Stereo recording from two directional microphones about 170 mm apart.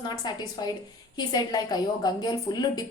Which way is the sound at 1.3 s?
25° left (ahead or behind).